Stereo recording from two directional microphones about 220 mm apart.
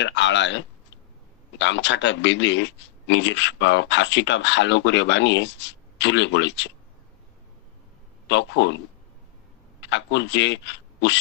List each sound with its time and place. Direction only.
0.0 s speech: 55° left (ahead or behind)
8.3 s speech: 55° left (ahead or behind)
9.8 s a man's voice: 55° left (ahead or behind)